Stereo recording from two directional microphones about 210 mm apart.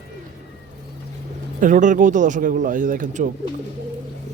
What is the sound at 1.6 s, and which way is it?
Speech, 40° right (ahead or behind).